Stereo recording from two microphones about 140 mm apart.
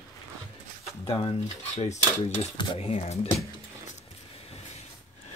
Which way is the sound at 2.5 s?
35° left (ahead or behind).